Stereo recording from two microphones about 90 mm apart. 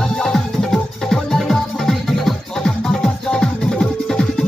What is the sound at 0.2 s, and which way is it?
Music, 5° left (ahead or behind).